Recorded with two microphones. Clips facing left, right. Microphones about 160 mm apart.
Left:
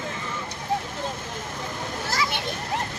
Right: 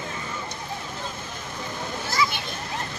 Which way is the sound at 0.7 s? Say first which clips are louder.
Left 11 dB; 90° left.